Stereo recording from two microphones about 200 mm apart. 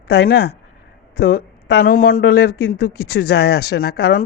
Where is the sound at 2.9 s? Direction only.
90° left.